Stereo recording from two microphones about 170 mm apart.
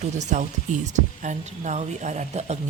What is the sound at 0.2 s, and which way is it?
Speech, 45° right (ahead or behind).